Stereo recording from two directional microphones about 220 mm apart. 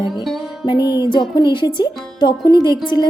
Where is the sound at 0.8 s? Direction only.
10° right (ahead or behind).